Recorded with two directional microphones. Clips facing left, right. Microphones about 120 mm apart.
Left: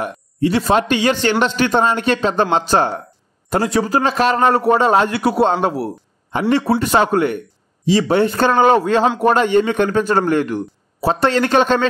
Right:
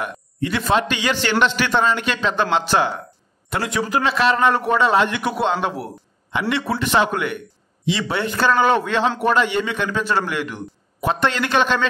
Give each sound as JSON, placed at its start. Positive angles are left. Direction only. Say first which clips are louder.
{"t": 0.0, "sound": "a man's voice", "louder": "left 6 dB", "side_deg": 35}